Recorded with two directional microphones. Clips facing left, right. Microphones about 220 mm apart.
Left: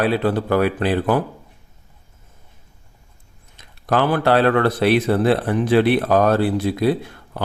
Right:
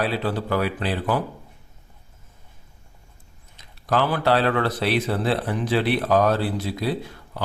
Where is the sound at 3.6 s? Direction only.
55° left (ahead or behind).